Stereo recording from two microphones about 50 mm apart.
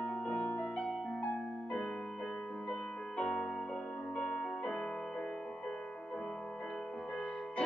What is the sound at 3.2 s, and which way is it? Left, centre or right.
Music, centre.